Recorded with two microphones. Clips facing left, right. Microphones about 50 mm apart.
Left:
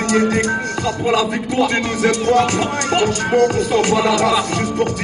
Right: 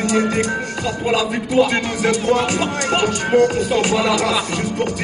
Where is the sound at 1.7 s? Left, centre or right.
Centre.